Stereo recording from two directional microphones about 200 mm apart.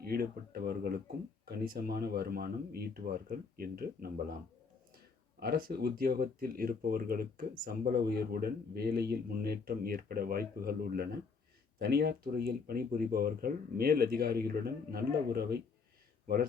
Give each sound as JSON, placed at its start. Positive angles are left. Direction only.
{"t": 0.0, "sound": "speech", "side_deg": -50}
{"t": 5.4, "sound": "speech", "side_deg": -50}